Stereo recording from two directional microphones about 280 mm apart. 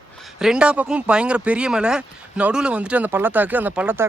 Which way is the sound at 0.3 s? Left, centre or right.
Centre.